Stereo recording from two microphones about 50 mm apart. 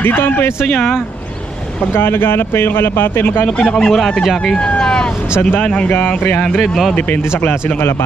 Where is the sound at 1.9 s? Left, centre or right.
Left.